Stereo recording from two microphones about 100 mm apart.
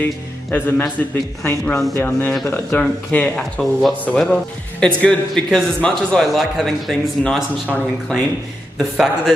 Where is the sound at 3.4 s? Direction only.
Centre (ahead or behind).